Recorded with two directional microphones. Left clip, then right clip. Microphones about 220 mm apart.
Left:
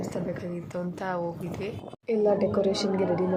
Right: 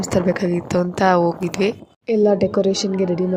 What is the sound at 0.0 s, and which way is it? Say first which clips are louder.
A woman's voice: right 14 dB; 45° right (ahead or behind).